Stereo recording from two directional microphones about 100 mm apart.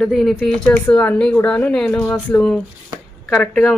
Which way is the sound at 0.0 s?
Centre (ahead or behind).